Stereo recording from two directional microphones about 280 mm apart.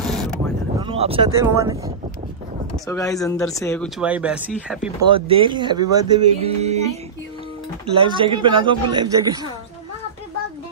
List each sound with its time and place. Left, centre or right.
0.0 s a sound: centre
0.7 s speech: centre
2.9 s speech: centre
4.0 s speech: centre
5.0 s speech: centre
7.9 s speech: centre